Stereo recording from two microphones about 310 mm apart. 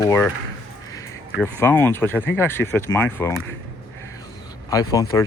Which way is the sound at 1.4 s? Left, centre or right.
Centre.